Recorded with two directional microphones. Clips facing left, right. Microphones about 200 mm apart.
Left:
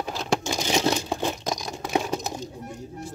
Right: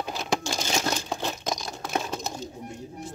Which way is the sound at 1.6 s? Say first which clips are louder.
Left 4 dB; 15° left (ahead or behind).